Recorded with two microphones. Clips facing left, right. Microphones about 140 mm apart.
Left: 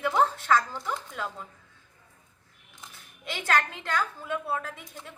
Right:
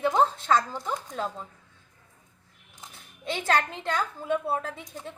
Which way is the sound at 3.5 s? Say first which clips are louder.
Right 1 dB; 25° right (ahead or behind).